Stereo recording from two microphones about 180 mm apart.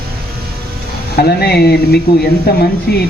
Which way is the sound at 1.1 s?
65° left (ahead or behind).